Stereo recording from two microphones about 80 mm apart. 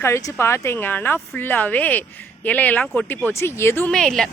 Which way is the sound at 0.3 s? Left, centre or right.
Left.